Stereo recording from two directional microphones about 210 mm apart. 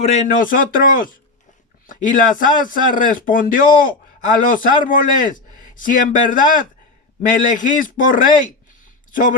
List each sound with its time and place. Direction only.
0.0 s speech: 30° left (ahead or behind)